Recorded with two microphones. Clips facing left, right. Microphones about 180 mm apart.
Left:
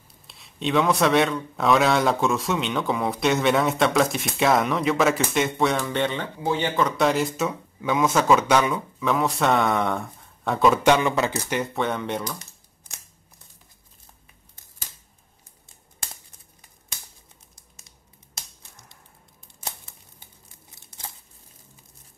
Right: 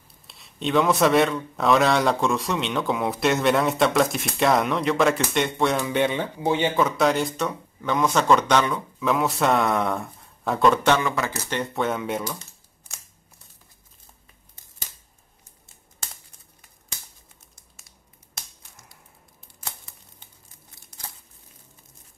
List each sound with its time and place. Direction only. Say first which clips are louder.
0.3 s a man's voice: right 1 dB; centre (ahead or behind)
7.0 s a man's voice: even; centre (ahead or behind)
10.9 s speech: left 2 dB; 20° left (ahead or behind)
11.7 s a man's voice: right 1 dB; centre (ahead or behind)
12.3 s typing: right 1 dB; 15° left (ahead or behind)